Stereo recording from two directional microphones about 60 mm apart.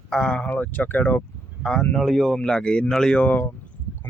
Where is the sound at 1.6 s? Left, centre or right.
Centre.